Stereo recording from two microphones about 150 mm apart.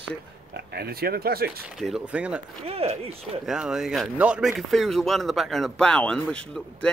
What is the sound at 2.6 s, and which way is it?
Speech, 40° right (ahead or behind).